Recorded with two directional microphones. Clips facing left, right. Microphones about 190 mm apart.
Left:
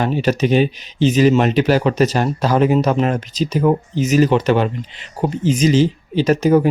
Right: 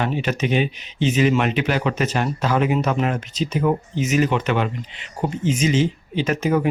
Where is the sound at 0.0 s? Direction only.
35° left (ahead or behind).